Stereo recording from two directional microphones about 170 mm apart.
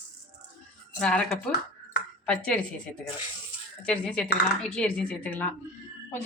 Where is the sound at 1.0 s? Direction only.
5° left (ahead or behind).